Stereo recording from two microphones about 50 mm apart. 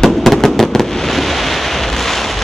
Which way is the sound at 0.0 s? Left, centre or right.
Centre.